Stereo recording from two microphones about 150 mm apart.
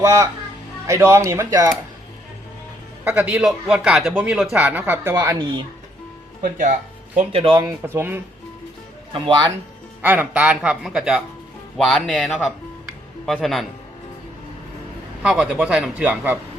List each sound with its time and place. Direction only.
0.0 s speech: 20° right (ahead or behind)
3.0 s speech: 10° right (ahead or behind)
5.1 s speech: 20° right (ahead or behind)
6.4 s speech: 60° right (ahead or behind)
7.2 s speech: 40° right (ahead or behind)
7.6 s speech: 15° right (ahead or behind)
9.1 s speech: 35° right (ahead or behind)
10.0 s speech: 10° right (ahead or behind)
15.2 s speech: 5° right (ahead or behind)